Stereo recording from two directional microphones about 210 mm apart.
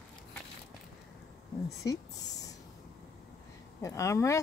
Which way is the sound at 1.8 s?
15° left (ahead or behind).